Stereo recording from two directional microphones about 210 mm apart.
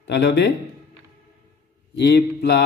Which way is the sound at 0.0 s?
55° left (ahead or behind).